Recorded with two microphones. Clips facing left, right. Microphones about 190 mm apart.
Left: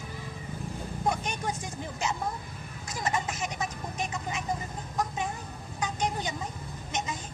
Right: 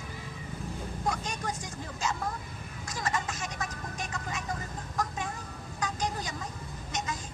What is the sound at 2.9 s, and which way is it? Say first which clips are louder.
Speech: left 2 dB; 25° left (ahead or behind).